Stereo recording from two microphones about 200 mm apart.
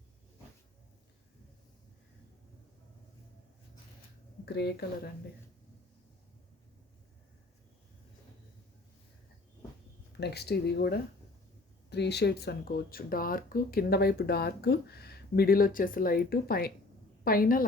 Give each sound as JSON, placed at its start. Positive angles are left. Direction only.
{"t": 4.4, "sound": "speech", "side_deg": 55}
{"t": 10.1, "sound": "speech", "side_deg": 55}